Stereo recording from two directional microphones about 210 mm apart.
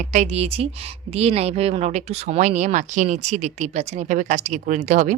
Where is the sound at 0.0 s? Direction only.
35° right (ahead or behind).